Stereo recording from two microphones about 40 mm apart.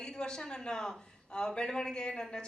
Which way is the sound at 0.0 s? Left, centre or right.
Centre.